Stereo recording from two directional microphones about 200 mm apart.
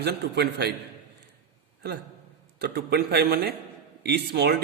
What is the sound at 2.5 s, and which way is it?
A man's voice, 55° right (ahead or behind).